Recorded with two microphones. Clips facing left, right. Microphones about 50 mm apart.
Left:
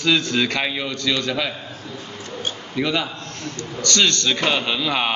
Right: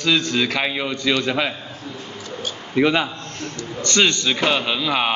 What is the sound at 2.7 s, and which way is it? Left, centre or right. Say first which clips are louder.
A man's voice: right 5 dB; right.